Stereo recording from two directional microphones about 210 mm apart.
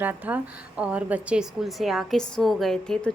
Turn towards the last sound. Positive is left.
turn(degrees=5)  # may be behind; listen again after turning